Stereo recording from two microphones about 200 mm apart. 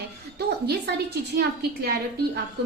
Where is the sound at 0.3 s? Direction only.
55° right (ahead or behind).